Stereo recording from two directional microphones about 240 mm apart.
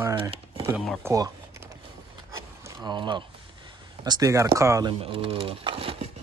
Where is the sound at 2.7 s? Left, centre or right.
Centre.